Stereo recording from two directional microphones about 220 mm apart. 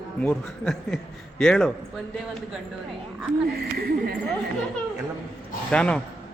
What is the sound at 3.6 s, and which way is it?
Speech, 45° right (ahead or behind).